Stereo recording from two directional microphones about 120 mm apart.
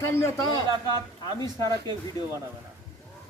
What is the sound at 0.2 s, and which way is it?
Speech, 30° left (ahead or behind).